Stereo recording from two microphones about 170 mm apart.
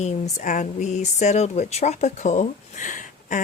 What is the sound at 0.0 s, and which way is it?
Speech, 45° left (ahead or behind).